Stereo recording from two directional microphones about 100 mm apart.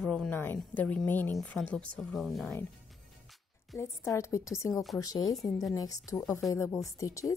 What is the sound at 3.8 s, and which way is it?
Speech, 30° left (ahead or behind).